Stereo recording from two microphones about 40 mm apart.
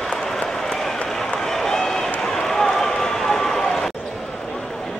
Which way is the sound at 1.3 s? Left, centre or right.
Centre.